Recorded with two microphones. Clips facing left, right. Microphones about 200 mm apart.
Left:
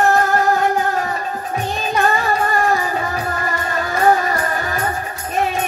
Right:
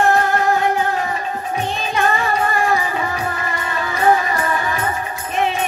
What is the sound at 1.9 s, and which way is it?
Music, 40° left (ahead or behind).